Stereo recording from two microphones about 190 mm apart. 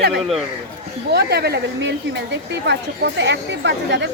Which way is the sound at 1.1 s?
55° right (ahead or behind).